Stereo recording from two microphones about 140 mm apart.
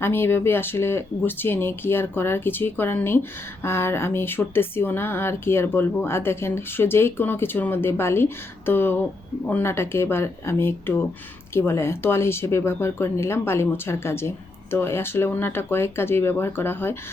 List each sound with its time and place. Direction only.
0.0 s speech: 15° left (ahead or behind)